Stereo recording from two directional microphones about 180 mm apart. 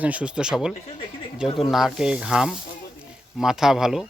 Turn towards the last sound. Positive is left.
turn(degrees=-5)  # may be behind; listen again after turning